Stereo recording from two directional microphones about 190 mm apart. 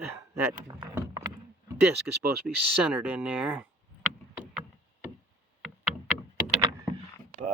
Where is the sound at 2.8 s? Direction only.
5° right (ahead or behind).